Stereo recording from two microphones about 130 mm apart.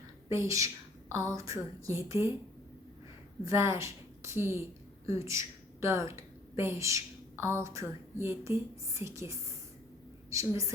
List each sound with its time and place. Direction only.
0.3 s speech: 25° right (ahead or behind)
3.4 s a woman's voice: 20° right (ahead or behind)